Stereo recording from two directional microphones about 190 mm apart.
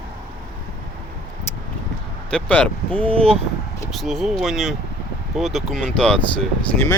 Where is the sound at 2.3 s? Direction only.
5° left (ahead or behind).